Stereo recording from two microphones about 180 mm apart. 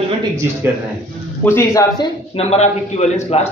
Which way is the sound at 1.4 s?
15° left (ahead or behind).